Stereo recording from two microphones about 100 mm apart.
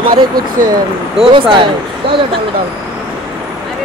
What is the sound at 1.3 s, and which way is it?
Speech, 55° right (ahead or behind).